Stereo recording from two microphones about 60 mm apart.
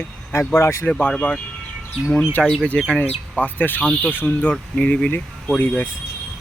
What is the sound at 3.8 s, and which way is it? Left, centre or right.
Speech, centre.